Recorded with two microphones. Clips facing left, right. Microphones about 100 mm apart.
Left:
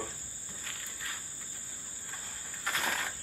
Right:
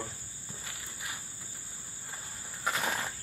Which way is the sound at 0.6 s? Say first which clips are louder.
Even; 15° right (ahead or behind).